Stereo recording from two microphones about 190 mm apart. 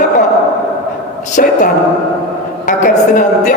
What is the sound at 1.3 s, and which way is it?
Speech, 40° left (ahead or behind).